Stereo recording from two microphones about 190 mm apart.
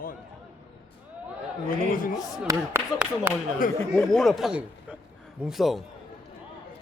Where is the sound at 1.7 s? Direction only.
45° left (ahead or behind).